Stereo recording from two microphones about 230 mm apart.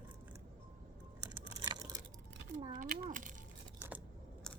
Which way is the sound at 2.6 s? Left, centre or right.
Right.